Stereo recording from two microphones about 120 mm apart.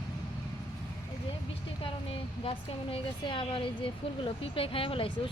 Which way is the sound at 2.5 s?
45° left (ahead or behind).